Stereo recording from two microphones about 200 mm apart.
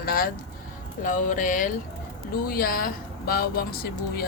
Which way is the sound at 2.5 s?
45° left (ahead or behind).